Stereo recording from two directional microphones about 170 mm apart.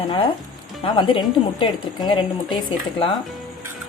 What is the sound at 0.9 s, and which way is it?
A woman's voice, 30° left (ahead or behind).